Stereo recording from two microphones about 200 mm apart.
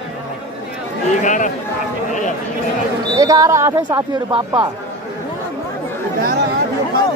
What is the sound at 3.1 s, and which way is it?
Speech, 15° right (ahead or behind).